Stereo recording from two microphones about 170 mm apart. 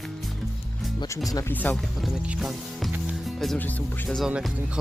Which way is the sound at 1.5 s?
10° left (ahead or behind).